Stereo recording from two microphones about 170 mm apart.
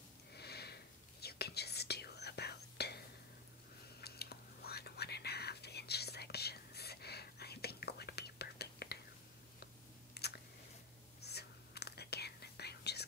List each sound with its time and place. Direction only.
0.3 s sniff: 70° left (ahead or behind)
1.2 s whispering: 70° left (ahead or behind)
4.0 s whispering: 70° left (ahead or behind)
10.1 s a sound: 70° left (ahead or behind)
11.1 s whispering: 75° left (ahead or behind)